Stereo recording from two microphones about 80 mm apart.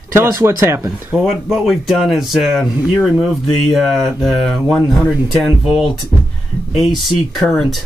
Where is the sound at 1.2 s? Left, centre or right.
Centre.